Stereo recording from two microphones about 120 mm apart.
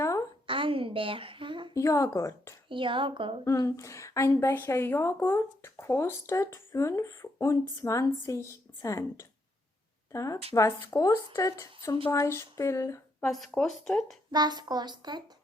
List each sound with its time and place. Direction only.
0.0 s a sound: 25° left (ahead or behind)
0.4 s a sound: 50° right (ahead or behind)
1.7 s a woman's voice: 25° left (ahead or behind)
2.6 s a woman's voice: 45° right (ahead or behind)
3.4 s a woman's voice: 25° left (ahead or behind)
13.2 s speech: 5° left (ahead or behind)
14.3 s a woman's voice: 35° right (ahead or behind)